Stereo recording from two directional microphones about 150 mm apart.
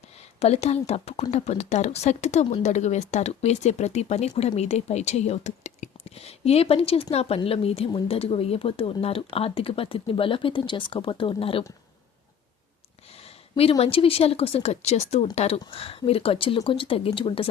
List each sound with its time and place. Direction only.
0.3 s speech: 45° left (ahead or behind)
13.6 s speech: 40° left (ahead or behind)